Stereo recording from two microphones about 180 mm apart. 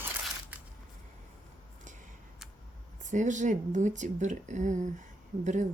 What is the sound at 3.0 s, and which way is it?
Speech, 45° right (ahead or behind).